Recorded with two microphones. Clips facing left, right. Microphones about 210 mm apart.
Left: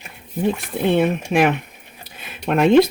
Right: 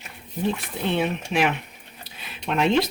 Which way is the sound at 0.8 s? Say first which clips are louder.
Left 7 dB; 50° left (ahead or behind).